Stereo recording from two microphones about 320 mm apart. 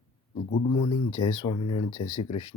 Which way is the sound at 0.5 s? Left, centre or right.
Centre.